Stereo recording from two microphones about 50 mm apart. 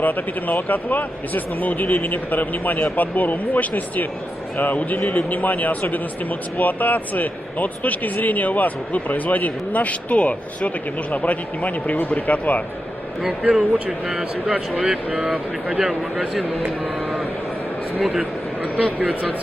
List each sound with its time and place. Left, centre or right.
0.0 s speech: left
13.4 s speech: centre